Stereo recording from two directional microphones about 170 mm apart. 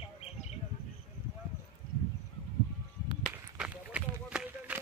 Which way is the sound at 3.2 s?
5° right (ahead or behind).